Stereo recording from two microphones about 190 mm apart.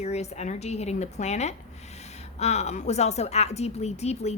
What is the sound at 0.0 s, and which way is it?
A woman's voice, 35° left (ahead or behind).